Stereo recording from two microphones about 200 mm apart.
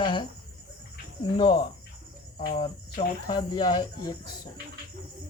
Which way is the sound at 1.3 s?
25° left (ahead or behind).